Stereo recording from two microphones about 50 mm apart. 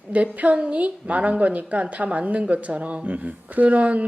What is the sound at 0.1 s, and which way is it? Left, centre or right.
A woman's voice, right.